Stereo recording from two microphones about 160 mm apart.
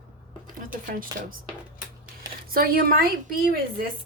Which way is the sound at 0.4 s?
60° right (ahead or behind).